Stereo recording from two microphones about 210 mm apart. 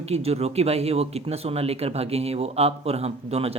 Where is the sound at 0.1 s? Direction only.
30° right (ahead or behind).